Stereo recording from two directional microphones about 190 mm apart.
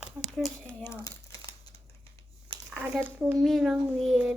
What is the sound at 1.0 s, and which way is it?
Crumpling, 20° left (ahead or behind).